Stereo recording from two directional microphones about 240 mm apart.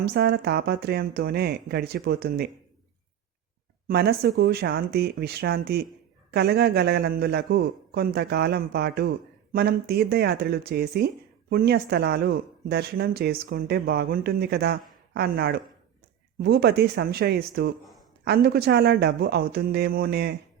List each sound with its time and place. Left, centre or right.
0.0 s a man's voice: right
3.8 s a man's voice: right